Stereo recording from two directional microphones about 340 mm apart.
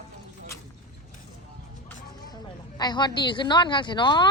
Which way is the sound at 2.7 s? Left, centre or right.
Centre.